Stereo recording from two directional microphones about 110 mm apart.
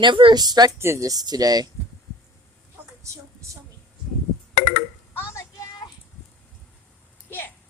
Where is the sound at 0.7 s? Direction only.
25° right (ahead or behind).